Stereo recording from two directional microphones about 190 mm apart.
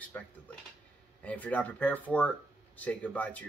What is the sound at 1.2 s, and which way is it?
Speech, 10° left (ahead or behind).